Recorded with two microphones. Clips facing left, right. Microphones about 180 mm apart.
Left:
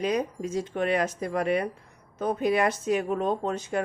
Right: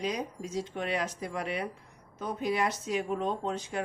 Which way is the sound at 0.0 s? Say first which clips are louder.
Left 7 dB; 55° left (ahead or behind).